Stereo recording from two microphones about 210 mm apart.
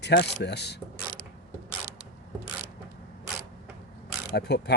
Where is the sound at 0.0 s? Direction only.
50° left (ahead or behind).